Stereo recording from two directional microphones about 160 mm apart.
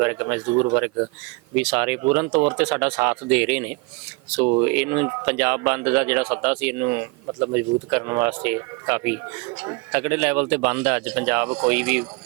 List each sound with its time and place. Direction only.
0.0 s speech: 15° right (ahead or behind)
1.5 s speech: 10° right (ahead or behind)